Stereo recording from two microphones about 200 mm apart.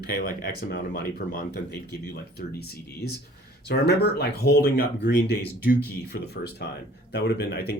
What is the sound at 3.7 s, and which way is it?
Speech, 55° left (ahead or behind).